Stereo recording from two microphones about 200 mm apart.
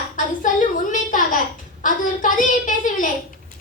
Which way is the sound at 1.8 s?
40° left (ahead or behind).